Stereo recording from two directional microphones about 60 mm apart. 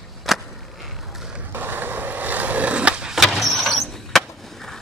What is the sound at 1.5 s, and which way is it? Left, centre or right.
Skateboard, right.